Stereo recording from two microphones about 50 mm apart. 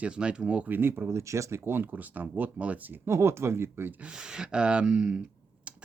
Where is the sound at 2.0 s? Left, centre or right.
Right.